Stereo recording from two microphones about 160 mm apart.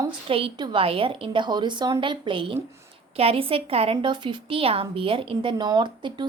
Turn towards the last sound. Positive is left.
turn(degrees=-30)  # may be behind; listen again after turning